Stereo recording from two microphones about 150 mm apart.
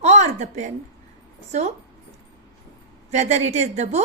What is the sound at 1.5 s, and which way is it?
Speech, 50° right (ahead or behind).